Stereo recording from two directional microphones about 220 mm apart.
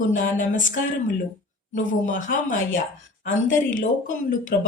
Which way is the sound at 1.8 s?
35° left (ahead or behind).